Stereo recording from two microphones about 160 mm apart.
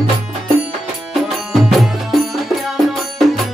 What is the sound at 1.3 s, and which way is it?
Music, centre (ahead or behind).